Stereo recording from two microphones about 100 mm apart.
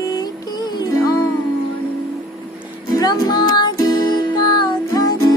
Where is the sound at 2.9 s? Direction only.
40° left (ahead or behind).